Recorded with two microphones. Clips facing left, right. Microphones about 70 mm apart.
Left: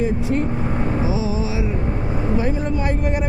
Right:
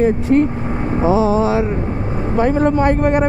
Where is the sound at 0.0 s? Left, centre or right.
Right.